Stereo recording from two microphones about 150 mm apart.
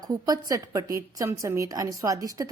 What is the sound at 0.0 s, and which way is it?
A woman's voice, 25° right (ahead or behind).